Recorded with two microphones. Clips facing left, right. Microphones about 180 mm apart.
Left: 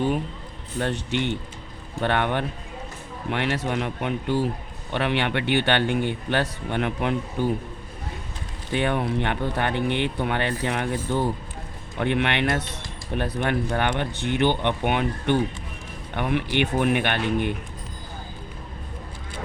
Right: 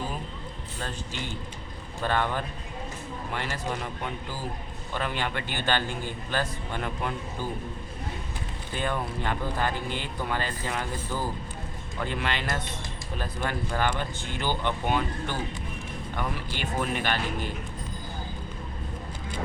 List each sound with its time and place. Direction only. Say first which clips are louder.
0.8 s speech: left 11 dB; 70° left (ahead or behind)
8.7 s speech: left 7 dB; 70° left (ahead or behind)